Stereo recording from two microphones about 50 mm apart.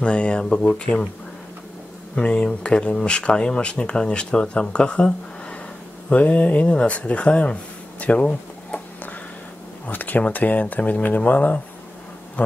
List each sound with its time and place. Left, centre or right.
0.0 s speech: left
2.3 s speech: centre
8.0 s a sound: left
9.8 s speech: left